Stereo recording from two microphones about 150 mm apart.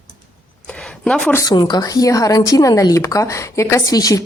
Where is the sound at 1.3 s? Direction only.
25° left (ahead or behind).